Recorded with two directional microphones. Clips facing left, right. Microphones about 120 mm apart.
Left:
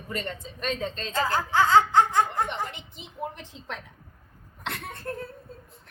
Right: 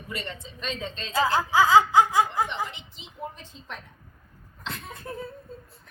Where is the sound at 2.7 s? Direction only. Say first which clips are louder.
Left 3 dB; 50° left (ahead or behind).